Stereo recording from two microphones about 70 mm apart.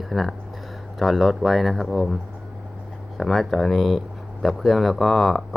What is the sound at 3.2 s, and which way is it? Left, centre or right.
Speech, centre.